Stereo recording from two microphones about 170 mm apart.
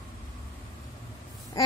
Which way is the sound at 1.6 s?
20° left (ahead or behind).